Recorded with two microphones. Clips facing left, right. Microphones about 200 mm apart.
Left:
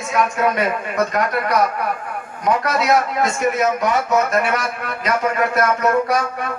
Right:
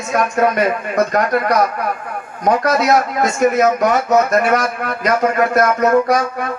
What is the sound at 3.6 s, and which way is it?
Speech, 45° right (ahead or behind).